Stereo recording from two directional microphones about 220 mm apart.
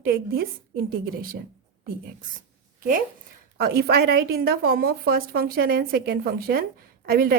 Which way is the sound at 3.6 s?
45° right (ahead or behind).